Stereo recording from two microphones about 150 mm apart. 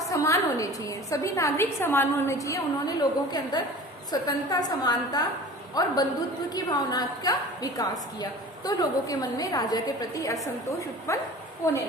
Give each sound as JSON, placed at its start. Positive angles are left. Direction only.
{"t": 0.1, "sound": "a woman's voice", "side_deg": 20}
{"t": 11.1, "sound": "a woman's voice", "side_deg": 20}